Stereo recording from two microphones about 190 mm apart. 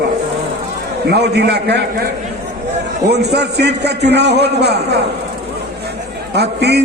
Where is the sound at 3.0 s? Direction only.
60° right (ahead or behind).